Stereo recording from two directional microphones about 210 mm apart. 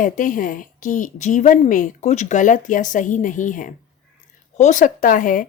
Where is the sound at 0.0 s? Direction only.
40° left (ahead or behind).